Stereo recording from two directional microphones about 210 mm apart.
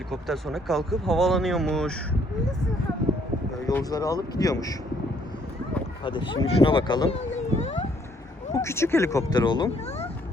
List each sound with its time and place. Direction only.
0.1 s speech: centre (ahead or behind)
3.7 s speech: 15° left (ahead or behind)
6.1 s speech: 20° left (ahead or behind)
7.3 s a sound: 30° left (ahead or behind)
8.5 s speech: 10° left (ahead or behind)